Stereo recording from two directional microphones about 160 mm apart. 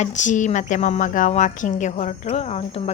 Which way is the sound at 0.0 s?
50° left (ahead or behind).